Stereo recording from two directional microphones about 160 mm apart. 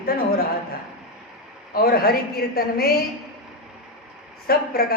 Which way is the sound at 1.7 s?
70° left (ahead or behind).